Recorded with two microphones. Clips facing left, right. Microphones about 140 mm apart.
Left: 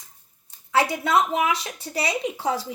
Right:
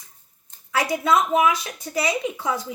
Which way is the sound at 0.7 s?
30° left (ahead or behind).